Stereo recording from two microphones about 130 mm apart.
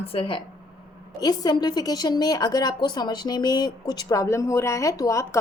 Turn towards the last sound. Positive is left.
turn(degrees=25)  # may be behind; listen again after turning